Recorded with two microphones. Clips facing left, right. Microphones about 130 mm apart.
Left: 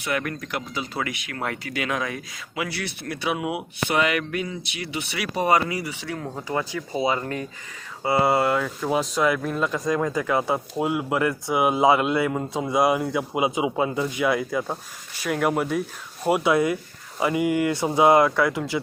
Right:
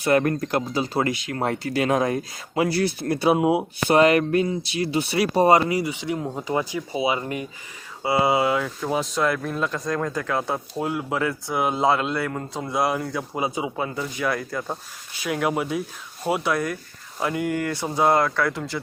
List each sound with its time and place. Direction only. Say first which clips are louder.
0.0 s speech: right 8 dB; 35° right (ahead or behind); by 7.4 s 15° right (ahead or behind)
8.2 s speech: even; centre (ahead or behind)
16.4 s speech: left 4 dB; 15° left (ahead or behind)
17.2 s speech: left 3 dB; 5° left (ahead or behind)